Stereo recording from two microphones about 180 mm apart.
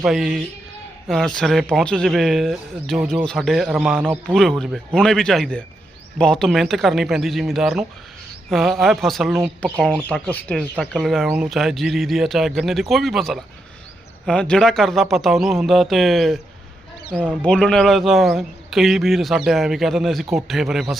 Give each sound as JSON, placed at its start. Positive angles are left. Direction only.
{"t": 0.0, "sound": "speech", "side_deg": -5}
{"t": 4.4, "sound": "speech", "side_deg": 0}
{"t": 17.4, "sound": "speech", "side_deg": 5}